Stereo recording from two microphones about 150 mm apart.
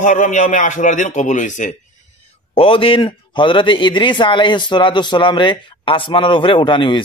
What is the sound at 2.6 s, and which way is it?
A man's voice, 35° left (ahead or behind).